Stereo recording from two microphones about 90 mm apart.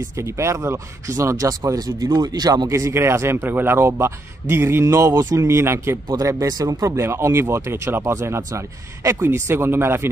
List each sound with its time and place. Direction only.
0.1 s speech: 35° right (ahead or behind); by 2.7 s 50° right (ahead or behind)
2.7 s speech: 30° right (ahead or behind)
6.0 s speech: 45° right (ahead or behind); by 10.0 s 25° right (ahead or behind)